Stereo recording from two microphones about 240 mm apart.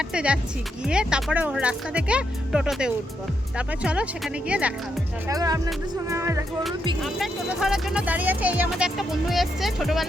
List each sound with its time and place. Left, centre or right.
0.1 s speech: centre
5.3 s music: centre
7.0 s speech: centre